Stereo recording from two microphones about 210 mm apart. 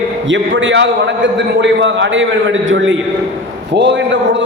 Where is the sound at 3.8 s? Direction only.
55° right (ahead or behind).